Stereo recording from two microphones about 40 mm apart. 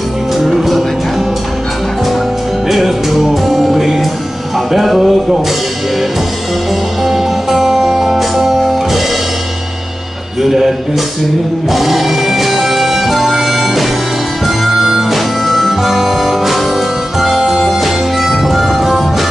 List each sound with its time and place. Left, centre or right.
0.4 s music: centre
2.7 s music: centre
7.1 s music: centre
10.4 s music: centre
11.7 s music: centre